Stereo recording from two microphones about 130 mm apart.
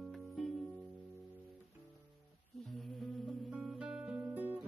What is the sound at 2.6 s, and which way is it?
Music, centre (ahead or behind).